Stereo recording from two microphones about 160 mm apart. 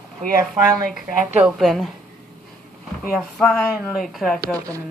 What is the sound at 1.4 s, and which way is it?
Speech, centre (ahead or behind).